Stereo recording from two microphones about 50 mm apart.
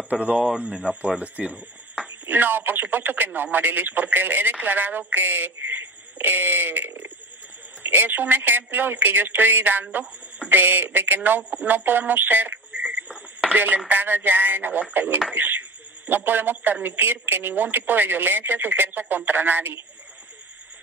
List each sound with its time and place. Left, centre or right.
0.1 s speech: right
2.0 s speech: right
12.7 s frog: right
13.1 s a sound: centre
13.8 s speech: right